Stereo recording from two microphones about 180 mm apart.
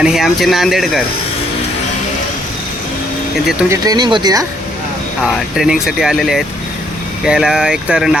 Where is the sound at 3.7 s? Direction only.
20° right (ahead or behind).